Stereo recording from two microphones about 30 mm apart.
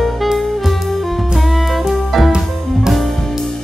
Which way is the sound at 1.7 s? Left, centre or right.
Centre.